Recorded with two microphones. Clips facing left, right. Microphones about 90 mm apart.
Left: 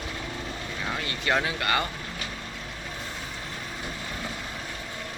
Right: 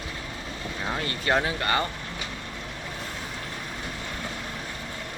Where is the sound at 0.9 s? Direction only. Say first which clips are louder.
Right 2 dB; 35° right (ahead or behind).